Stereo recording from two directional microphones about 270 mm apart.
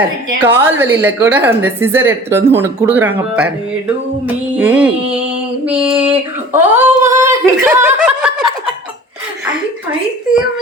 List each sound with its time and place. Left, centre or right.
0.4 s a woman's voice: centre
5.7 s a sound: centre
6.5 s a woman's voice: centre